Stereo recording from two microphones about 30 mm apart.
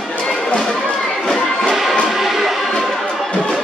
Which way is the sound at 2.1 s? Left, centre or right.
Centre.